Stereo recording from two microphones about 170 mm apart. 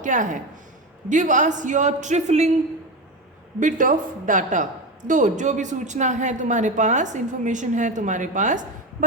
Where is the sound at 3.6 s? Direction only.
50° right (ahead or behind).